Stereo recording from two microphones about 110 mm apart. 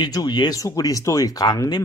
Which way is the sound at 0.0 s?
35° left (ahead or behind).